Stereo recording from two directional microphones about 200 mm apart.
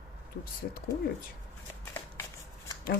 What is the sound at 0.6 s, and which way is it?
Speech, 50° left (ahead or behind).